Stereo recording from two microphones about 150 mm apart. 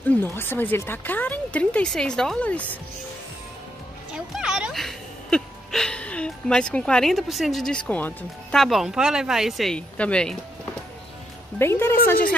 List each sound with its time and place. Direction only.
0.1 s speech: 15° left (ahead or behind)
4.1 s speech: 5° right (ahead or behind); by 12.0 s 15° left (ahead or behind)